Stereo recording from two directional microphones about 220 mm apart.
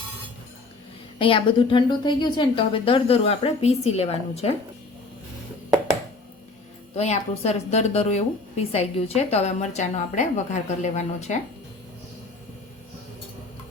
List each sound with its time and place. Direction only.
1.2 s a woman's voice: 25° left (ahead or behind)
6.9 s a woman's voice: 30° left (ahead or behind)